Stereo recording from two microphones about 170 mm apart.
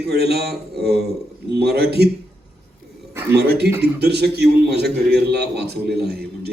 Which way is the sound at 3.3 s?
75° right (ahead or behind).